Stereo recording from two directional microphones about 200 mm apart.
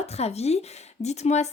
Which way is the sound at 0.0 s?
30° left (ahead or behind).